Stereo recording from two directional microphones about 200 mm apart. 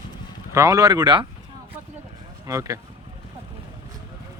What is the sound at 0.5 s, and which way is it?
Speech, 15° right (ahead or behind).